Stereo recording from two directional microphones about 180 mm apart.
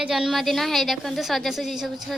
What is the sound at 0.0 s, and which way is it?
A woman's voice, centre (ahead or behind).